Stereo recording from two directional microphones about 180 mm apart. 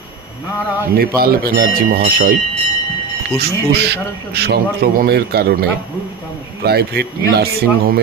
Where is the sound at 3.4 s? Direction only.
65° right (ahead or behind).